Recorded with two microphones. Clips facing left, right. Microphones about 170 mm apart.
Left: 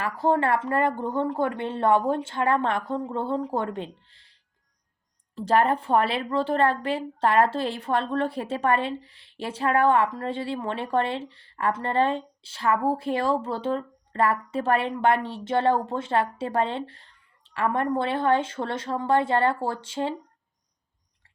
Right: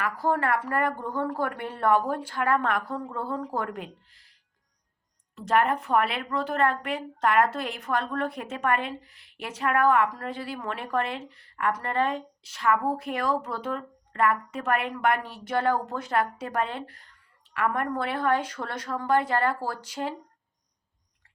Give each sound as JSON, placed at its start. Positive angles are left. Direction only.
{"t": 0.0, "sound": "a woman's voice", "side_deg": 25}